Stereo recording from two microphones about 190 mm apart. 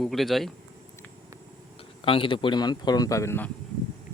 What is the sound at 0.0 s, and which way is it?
Speech, centre (ahead or behind).